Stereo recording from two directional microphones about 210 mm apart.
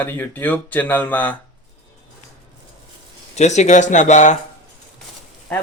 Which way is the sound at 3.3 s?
35° left (ahead or behind).